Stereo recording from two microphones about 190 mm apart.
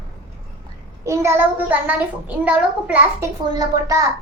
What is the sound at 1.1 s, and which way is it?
A child's voice, 15° right (ahead or behind).